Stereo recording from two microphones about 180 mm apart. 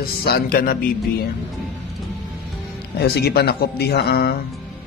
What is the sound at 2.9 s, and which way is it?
Speech, 60° left (ahead or behind).